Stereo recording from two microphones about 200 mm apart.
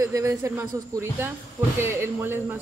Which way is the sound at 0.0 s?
15° right (ahead or behind).